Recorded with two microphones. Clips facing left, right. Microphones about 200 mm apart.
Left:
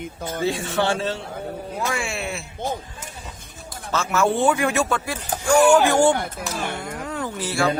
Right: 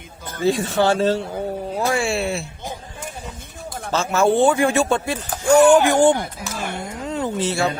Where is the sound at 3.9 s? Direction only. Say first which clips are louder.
Right 3 dB; 30° right (ahead or behind).